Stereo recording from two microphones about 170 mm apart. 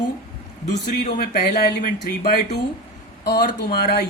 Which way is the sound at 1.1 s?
60° left (ahead or behind).